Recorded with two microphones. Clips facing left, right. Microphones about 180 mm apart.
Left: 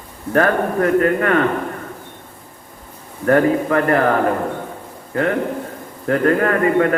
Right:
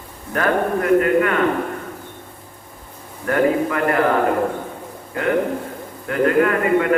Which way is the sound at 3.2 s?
40° left (ahead or behind).